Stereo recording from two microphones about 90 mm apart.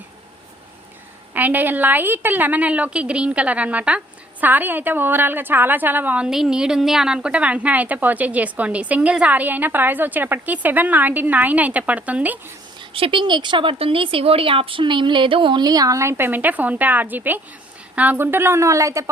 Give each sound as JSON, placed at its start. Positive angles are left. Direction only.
{"t": 1.3, "sound": "a woman's voice", "side_deg": -20}
{"t": 12.9, "sound": "speech", "side_deg": -80}
{"t": 15.6, "sound": "a woman's voice", "side_deg": -45}